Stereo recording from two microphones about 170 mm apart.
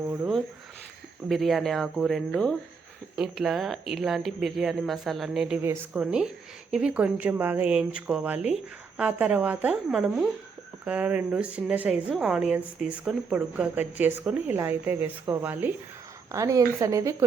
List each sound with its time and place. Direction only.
1.3 s a woman's voice: centre (ahead or behind); by 17.2 s 15° right (ahead or behind)